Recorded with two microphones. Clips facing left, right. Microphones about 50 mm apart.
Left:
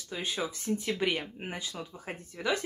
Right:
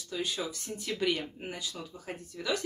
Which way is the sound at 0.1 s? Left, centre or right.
Left.